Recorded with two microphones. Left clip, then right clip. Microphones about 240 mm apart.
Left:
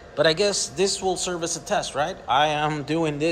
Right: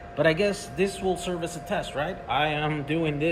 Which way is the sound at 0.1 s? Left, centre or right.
Centre.